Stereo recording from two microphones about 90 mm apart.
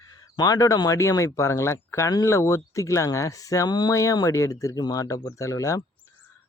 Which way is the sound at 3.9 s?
35° left (ahead or behind).